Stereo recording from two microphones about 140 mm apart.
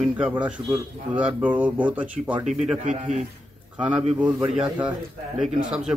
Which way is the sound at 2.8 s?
60° right (ahead or behind).